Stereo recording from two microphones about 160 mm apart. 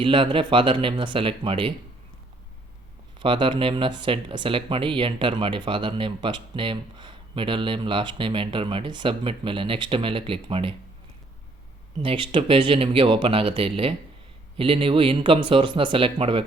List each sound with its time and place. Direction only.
0.0 s speech: 30° right (ahead or behind)
3.2 s speech: 30° right (ahead or behind)
12.0 s speech: 35° right (ahead or behind)